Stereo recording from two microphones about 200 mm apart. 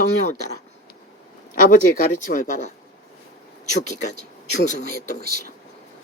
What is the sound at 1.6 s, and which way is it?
Speech, 40° left (ahead or behind).